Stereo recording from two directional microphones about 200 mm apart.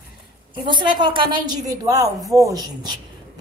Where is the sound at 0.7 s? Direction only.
25° right (ahead or behind).